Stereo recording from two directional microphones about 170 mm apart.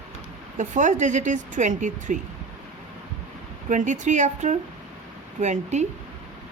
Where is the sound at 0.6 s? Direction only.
45° right (ahead or behind).